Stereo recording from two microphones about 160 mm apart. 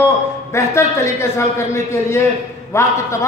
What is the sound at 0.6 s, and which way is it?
A man's voice, 20° left (ahead or behind).